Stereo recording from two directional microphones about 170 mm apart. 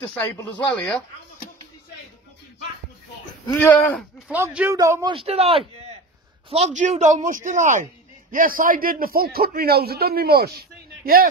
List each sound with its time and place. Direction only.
0.0 s speech: 5° left (ahead or behind)
3.4 s speech: 15° left (ahead or behind)
4.3 s speech: 10° right (ahead or behind)
5.1 s a man's voice: 35° right (ahead or behind); by 10.6 s 65° right (ahead or behind)